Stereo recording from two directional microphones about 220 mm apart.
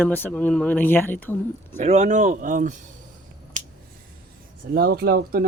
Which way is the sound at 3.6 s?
35° right (ahead or behind).